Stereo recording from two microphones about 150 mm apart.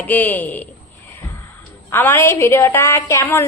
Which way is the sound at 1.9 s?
15° left (ahead or behind).